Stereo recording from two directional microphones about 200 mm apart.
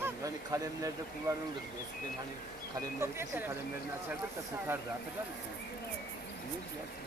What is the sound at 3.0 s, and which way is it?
Speech, 10° right (ahead or behind).